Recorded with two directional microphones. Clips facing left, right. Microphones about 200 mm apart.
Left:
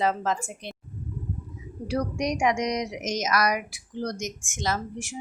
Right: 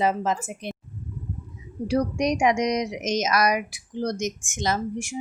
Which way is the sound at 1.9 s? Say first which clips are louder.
Right 4 dB; 20° right (ahead or behind).